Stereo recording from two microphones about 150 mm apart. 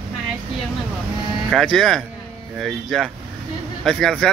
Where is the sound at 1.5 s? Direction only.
5° left (ahead or behind).